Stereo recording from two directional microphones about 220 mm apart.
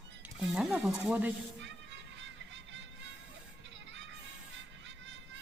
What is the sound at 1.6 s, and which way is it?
Music, 55° right (ahead or behind).